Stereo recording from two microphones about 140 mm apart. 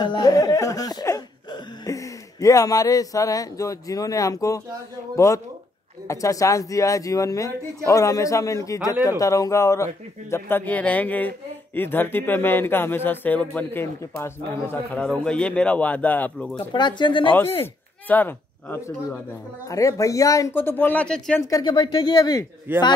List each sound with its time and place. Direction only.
0.0 s speech: 30° left (ahead or behind)
15.0 s speech: 5° left (ahead or behind)
16.5 s speech: 35° left (ahead or behind)
17.3 s speech: 15° left (ahead or behind)
21.4 s speech: 25° left (ahead or behind)